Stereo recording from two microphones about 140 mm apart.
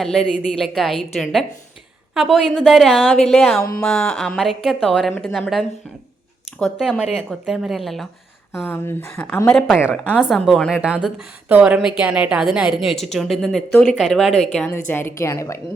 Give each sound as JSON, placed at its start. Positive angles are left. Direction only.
{"t": 0.0, "sound": "a woman's voice", "side_deg": 0}
{"t": 8.6, "sound": "a woman's voice", "side_deg": 15}
{"t": 14.7, "sound": "a woman's voice", "side_deg": 15}